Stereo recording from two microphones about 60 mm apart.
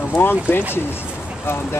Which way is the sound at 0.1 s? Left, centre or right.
Left.